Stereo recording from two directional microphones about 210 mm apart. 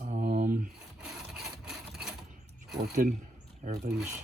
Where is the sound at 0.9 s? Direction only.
Centre (ahead or behind).